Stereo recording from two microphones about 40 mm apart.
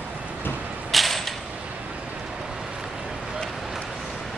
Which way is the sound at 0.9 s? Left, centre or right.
Centre.